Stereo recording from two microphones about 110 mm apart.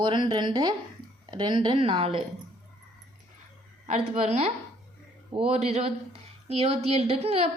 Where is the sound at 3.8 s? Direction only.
90° right.